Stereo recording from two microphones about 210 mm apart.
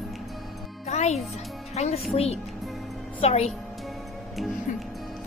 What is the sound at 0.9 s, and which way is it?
A child's voice, 35° left (ahead or behind).